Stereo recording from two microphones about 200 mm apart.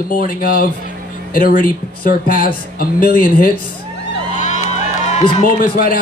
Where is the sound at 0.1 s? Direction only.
45° left (ahead or behind).